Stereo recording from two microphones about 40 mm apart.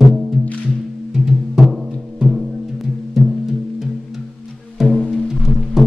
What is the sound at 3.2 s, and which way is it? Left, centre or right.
Music, centre.